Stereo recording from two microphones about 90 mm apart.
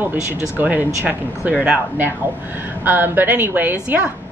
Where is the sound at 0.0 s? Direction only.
20° right (ahead or behind).